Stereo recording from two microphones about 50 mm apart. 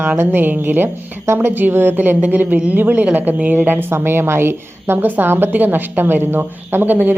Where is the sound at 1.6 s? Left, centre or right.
Right.